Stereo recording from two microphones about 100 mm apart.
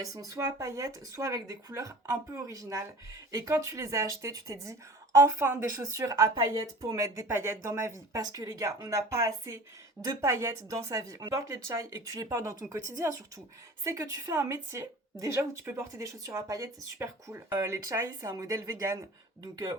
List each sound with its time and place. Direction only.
0.0 s a woman's voice: 35° right (ahead or behind)
8.2 s a woman's voice: 40° right (ahead or behind)